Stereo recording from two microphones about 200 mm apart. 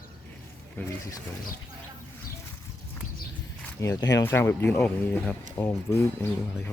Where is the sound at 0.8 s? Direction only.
10° left (ahead or behind).